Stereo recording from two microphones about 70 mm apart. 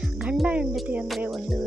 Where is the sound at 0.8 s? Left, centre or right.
Centre.